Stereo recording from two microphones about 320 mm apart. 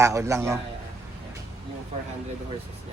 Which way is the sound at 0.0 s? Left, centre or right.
Centre.